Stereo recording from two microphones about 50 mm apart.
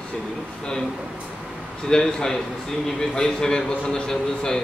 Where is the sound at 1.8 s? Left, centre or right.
Centre.